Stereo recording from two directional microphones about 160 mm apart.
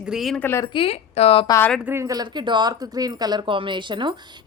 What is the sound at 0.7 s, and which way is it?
Speech, 35° left (ahead or behind).